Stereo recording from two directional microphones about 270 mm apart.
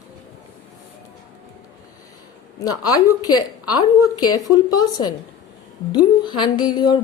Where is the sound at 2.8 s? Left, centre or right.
Centre.